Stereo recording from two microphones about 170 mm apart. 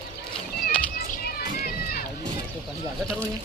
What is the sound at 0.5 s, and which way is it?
Children playing, 55° left (ahead or behind).